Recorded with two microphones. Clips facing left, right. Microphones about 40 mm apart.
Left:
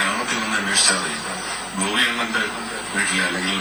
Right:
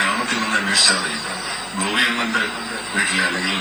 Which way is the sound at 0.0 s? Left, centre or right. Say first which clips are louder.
Right 2 dB; right.